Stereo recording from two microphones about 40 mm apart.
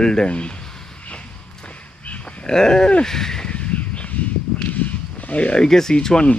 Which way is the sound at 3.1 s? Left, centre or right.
Centre.